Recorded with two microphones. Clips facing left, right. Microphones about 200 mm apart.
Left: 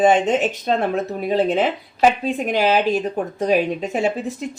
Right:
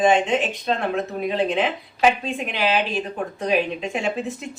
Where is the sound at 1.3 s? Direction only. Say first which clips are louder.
Left 5 dB; 40° left (ahead or behind).